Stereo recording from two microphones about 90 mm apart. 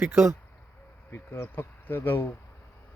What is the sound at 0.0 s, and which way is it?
Speech, 25° right (ahead or behind).